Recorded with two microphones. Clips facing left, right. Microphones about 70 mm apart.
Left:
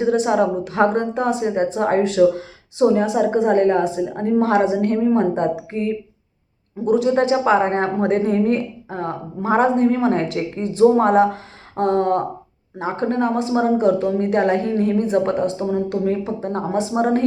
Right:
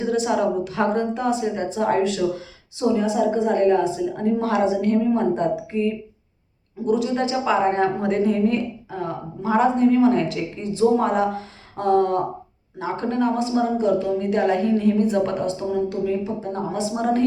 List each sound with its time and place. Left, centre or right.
0.1 s a woman's voice: left
16.9 s a woman's voice: left